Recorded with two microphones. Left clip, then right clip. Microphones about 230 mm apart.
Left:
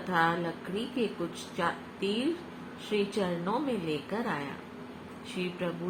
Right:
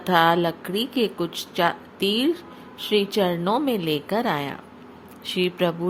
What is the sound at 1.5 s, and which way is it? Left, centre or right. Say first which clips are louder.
A woman's voice: right 10 dB; right.